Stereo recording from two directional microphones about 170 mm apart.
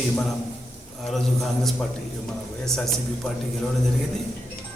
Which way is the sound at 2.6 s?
Centre (ahead or behind).